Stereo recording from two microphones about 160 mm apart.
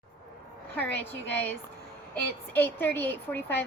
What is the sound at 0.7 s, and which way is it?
A woman's voice, 10° left (ahead or behind).